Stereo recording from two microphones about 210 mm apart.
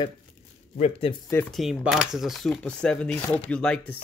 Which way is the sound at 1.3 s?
5° left (ahead or behind).